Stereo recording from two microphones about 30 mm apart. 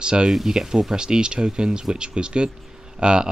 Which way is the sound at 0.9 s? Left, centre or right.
Right.